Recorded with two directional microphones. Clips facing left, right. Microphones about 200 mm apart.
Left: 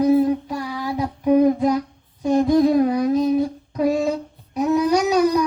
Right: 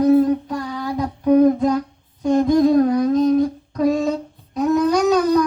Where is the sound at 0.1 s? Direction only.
10° left (ahead or behind).